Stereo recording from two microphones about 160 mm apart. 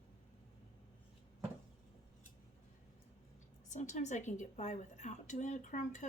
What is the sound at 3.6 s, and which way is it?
A woman's voice, 50° left (ahead or behind).